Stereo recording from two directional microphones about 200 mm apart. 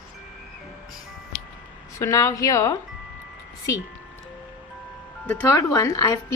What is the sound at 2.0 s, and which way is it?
Speech, 15° left (ahead or behind).